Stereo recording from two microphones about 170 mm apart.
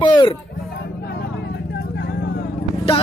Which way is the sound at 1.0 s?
70° left (ahead or behind).